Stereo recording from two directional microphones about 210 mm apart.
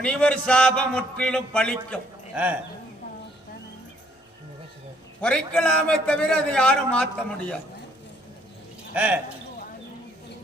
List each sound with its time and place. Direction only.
0.0 s a man's voice: 5° left (ahead or behind)
2.3 s speech: 5° right (ahead or behind)
5.2 s a man's voice: 5° left (ahead or behind)
8.9 s speech: 5° right (ahead or behind)